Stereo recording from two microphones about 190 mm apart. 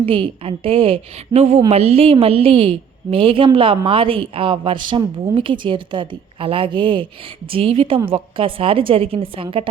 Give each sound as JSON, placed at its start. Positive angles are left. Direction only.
{"t": 0.0, "sound": "a woman's voice", "side_deg": -30}